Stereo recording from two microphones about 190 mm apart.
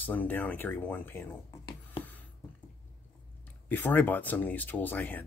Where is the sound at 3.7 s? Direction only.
10° left (ahead or behind).